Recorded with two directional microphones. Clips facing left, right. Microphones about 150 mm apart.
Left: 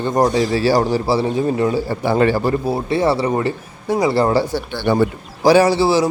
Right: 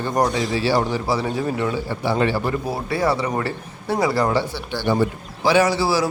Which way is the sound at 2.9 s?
25° left (ahead or behind).